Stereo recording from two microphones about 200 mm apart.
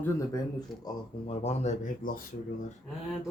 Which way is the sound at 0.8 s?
30° left (ahead or behind).